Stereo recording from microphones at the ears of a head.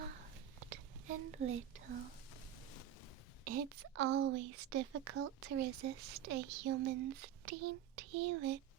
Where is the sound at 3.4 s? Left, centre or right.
Right.